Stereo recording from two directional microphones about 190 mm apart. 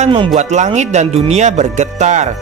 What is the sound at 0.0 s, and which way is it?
Speech, 30° right (ahead or behind).